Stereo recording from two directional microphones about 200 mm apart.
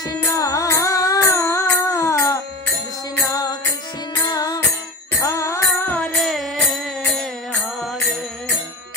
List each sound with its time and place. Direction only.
0.1 s music: 15° left (ahead or behind); by 7.2 s centre (ahead or behind)